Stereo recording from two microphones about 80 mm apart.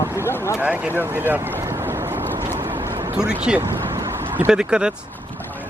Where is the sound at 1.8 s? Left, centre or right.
Right.